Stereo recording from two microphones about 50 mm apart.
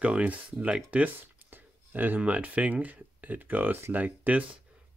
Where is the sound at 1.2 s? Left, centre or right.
Right.